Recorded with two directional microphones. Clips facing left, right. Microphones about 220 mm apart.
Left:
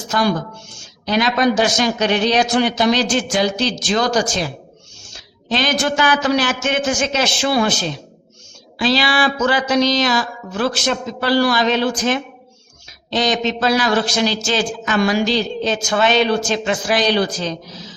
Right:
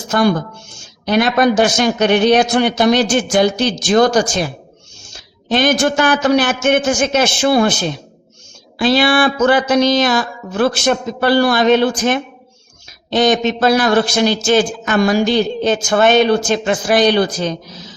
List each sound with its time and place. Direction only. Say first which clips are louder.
0.1 s a woman's voice: right 4 dB; 55° right (ahead or behind)